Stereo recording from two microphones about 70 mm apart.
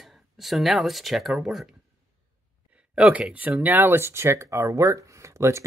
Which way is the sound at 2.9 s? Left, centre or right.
Centre.